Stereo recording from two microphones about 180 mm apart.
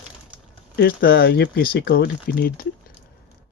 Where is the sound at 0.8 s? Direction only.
60° left (ahead or behind).